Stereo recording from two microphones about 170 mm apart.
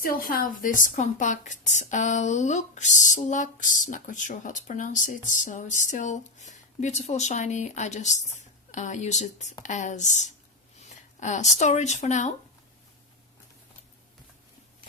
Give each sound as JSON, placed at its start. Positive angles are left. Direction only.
{"t": 0.0, "sound": "a woman's voice", "side_deg": 60}